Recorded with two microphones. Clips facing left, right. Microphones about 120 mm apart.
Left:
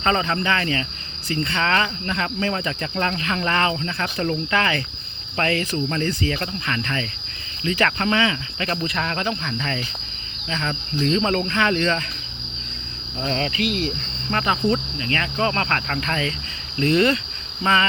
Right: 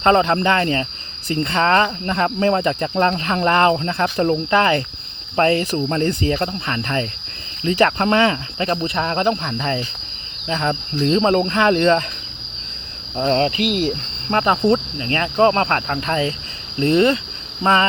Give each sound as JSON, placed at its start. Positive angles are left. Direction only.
{"t": 0.0, "sound": "speech", "side_deg": -45}
{"t": 8.0, "sound": "speech", "side_deg": -45}
{"t": 8.5, "sound": "speech", "side_deg": -30}
{"t": 13.2, "sound": "speech", "side_deg": -40}
{"t": 17.6, "sound": "speech", "side_deg": -35}